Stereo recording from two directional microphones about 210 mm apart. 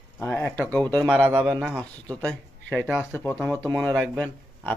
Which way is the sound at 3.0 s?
10° left (ahead or behind).